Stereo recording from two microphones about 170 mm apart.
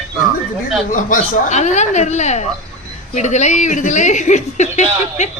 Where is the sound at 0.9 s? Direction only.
50° left (ahead or behind).